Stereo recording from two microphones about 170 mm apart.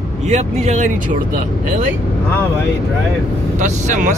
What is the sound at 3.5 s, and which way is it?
Speech, 45° right (ahead or behind).